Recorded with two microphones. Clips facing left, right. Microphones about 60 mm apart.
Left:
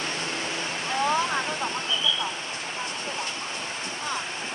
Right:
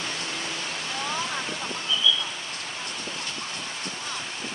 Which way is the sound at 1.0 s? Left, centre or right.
Left.